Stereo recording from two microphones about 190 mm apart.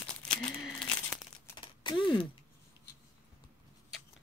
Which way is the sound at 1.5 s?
25° left (ahead or behind).